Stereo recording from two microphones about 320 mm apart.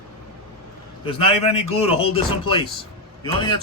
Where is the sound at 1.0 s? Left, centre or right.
Centre.